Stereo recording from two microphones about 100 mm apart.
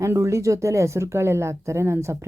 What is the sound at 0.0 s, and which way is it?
Speech, 30° right (ahead or behind).